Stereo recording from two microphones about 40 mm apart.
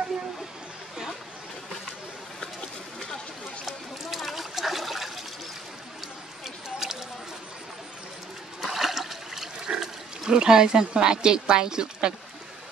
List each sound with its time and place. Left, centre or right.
3.6 s water: centre
6.4 s a sound: centre
8.5 s water: centre